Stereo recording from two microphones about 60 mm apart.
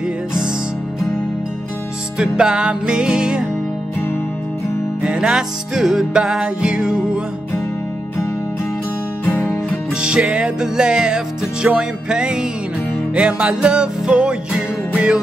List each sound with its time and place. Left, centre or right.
2.1 s music: centre
5.0 s music: centre
9.2 s music: left
10.0 s music: centre